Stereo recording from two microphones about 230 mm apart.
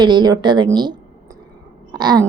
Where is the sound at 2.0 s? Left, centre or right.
Centre.